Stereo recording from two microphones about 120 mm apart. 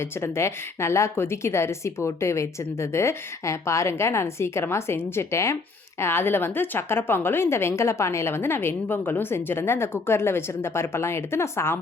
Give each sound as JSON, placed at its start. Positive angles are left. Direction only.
{"t": 0.2, "sound": "a woman's voice", "side_deg": 20}